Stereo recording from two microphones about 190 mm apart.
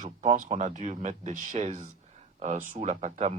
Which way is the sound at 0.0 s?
40° right (ahead or behind).